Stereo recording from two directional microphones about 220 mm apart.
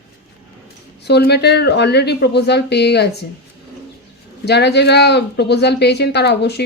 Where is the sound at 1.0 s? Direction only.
50° left (ahead or behind).